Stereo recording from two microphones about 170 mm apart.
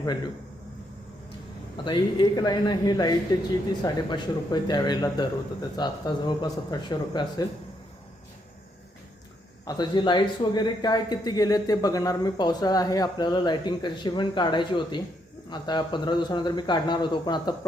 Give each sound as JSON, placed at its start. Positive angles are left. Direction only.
{"t": 1.7, "sound": "speech", "side_deg": 30}
{"t": 9.6, "sound": "speech", "side_deg": 25}